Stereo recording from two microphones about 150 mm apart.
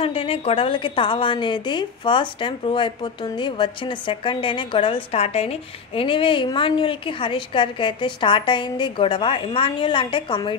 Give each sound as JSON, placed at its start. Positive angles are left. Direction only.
{"t": 0.0, "sound": "a woman's voice", "side_deg": 40}